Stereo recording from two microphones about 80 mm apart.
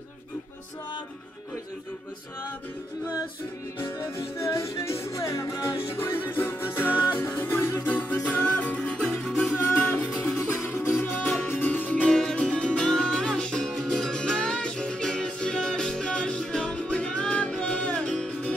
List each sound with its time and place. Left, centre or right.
4.4 s music: left
6.9 s music: centre
7.2 s music: left
7.9 s music: centre
10.5 s music: left; by 18.5 s centre